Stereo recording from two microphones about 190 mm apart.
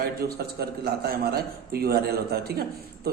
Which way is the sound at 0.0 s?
55° right (ahead or behind).